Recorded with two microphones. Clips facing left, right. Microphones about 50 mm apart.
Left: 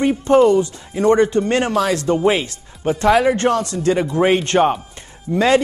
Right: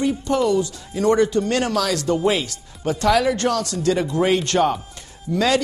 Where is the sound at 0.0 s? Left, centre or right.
Left.